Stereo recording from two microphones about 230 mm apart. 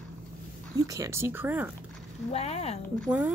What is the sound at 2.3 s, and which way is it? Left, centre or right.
Speech, left.